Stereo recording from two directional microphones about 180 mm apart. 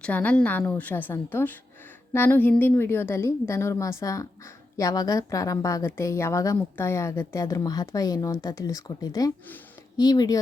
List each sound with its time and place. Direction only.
0.0 s a woman's voice: 5° left (ahead or behind)